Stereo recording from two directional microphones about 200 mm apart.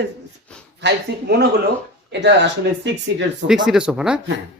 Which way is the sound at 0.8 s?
55° right (ahead or behind).